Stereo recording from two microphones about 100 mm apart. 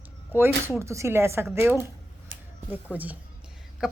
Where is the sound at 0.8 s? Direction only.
30° right (ahead or behind).